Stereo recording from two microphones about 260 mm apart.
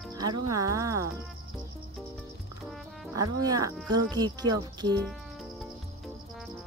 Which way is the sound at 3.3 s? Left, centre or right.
Centre.